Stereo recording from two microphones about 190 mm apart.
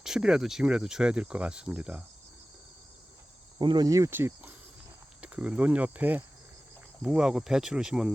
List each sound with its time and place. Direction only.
0.0 s speech: 5° right (ahead or behind)
3.6 s speech: 25° right (ahead or behind); by 8.1 s 5° right (ahead or behind)